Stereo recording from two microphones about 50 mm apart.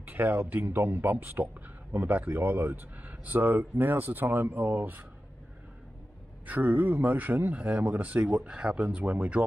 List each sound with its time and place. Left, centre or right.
0.0 s speech: right
6.4 s speech: right